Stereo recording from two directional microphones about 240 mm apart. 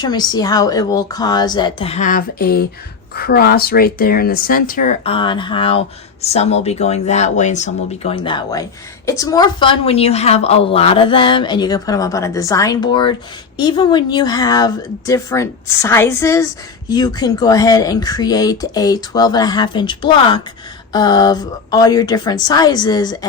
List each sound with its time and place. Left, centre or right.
0.0 s a woman's voice: centre